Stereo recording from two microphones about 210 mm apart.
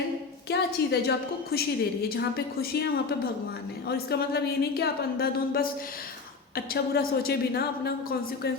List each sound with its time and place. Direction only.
0.5 s a woman's voice: 50° left (ahead or behind)
6.9 s a woman's voice: 45° left (ahead or behind)